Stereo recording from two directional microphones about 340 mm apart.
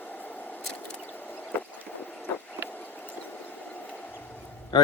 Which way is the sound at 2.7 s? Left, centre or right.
Centre.